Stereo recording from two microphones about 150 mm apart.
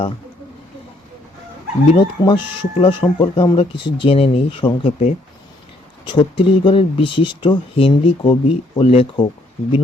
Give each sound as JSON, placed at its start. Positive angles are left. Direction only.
{"t": 1.9, "sound": "speech", "side_deg": 30}
{"t": 8.8, "sound": "speech", "side_deg": 40}